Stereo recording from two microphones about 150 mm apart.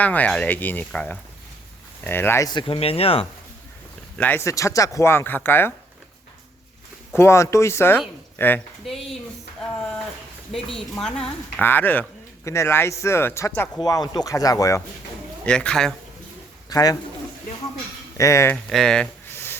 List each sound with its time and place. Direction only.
0.0 s speech: 10° left (ahead or behind)
2.5 s speech: 35° left (ahead or behind)
4.2 s speech: 15° left (ahead or behind)
7.1 s speech: 15° left (ahead or behind)
8.9 s a woman's voice: centre (ahead or behind)
10.5 s a woman's voice: centre (ahead or behind); by 14.8 s 20° left (ahead or behind)
15.4 s a woman's voice: 5° left (ahead or behind)
16.6 s speech: 25° left (ahead or behind)
18.2 s speech: 20° left (ahead or behind)
18.5 s a woman's voice: 5° left (ahead or behind)
19.3 s a sound: 15° left (ahead or behind)